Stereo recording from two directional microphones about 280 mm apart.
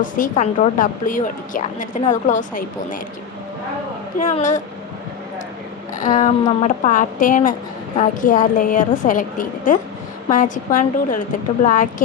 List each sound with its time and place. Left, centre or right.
0.0 s a woman's voice: left
4.2 s a woman's voice: left
6.0 s a woman's voice: left